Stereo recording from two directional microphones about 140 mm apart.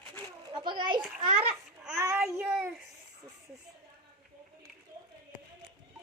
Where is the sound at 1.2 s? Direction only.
40° right (ahead or behind).